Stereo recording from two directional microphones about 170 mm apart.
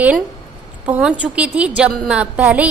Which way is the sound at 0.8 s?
10° right (ahead or behind).